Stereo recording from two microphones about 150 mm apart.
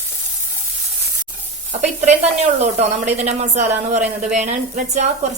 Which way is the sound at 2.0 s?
50° right (ahead or behind).